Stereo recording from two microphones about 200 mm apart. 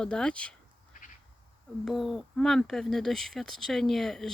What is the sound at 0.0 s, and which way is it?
Speech, 5° left (ahead or behind).